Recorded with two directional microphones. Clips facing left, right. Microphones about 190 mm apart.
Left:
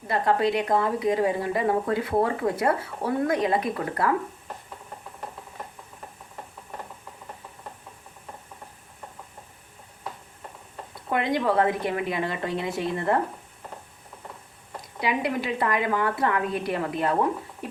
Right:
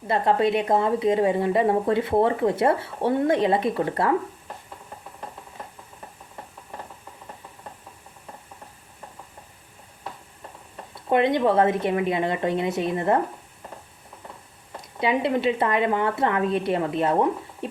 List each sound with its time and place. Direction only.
0.1 s speech: 25° right (ahead or behind)
11.1 s speech: 25° right (ahead or behind)
15.0 s speech: 25° right (ahead or behind)
17.6 s a sound: 25° right (ahead or behind)